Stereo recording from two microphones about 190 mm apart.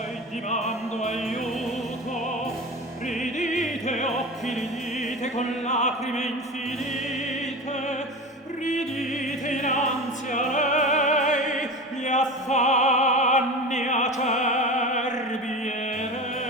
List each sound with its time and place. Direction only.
0.5 s music: 40° left (ahead or behind)
3.1 s music: 40° left (ahead or behind)
5.2 s opera: 35° left (ahead or behind)
8.6 s music: 40° left (ahead or behind)
9.1 s opera: 40° left (ahead or behind)
10.3 s music: 40° left (ahead or behind)
12.0 s opera: 40° left (ahead or behind)